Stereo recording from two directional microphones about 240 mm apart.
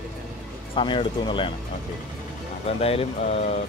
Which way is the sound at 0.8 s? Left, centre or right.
Left.